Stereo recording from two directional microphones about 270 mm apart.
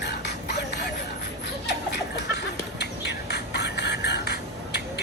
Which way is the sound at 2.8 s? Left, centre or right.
Left.